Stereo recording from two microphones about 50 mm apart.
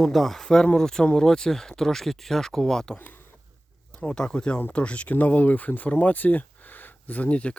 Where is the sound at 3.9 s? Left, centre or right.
Centre.